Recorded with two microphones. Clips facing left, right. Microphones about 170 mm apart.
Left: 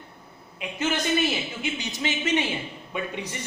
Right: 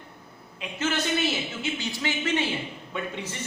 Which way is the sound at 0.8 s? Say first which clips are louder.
Left 2 dB; 15° left (ahead or behind).